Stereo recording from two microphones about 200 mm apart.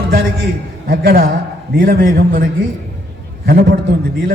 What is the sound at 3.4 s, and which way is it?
Speech, 45° right (ahead or behind).